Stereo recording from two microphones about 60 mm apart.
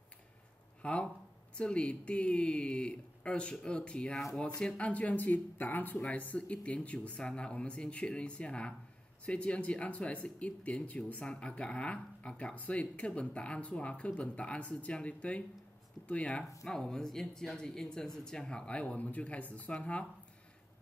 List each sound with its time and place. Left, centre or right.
0.8 s speech: centre
5.9 s speech: left